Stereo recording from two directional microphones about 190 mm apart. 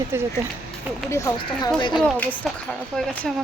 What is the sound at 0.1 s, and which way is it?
Speech, 15° right (ahead or behind).